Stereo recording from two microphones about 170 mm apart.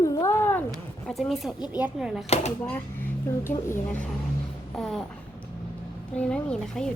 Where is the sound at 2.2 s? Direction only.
40° left (ahead or behind).